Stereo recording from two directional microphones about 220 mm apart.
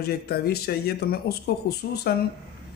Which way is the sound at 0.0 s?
45° left (ahead or behind).